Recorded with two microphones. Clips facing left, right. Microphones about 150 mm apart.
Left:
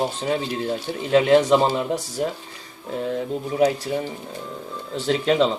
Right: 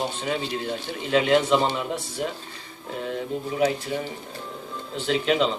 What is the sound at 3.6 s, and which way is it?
Speech, 40° left (ahead or behind).